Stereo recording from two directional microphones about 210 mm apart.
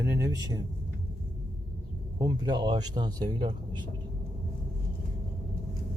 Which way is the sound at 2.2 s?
20° right (ahead or behind).